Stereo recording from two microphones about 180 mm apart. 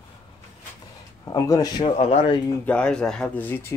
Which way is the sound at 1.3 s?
20° left (ahead or behind).